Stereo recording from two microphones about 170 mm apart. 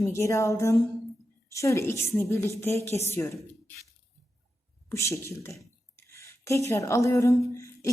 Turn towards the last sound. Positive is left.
turn(degrees=15)  # may be behind; listen again after turning